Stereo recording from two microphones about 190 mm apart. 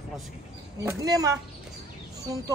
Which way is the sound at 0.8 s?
20° right (ahead or behind).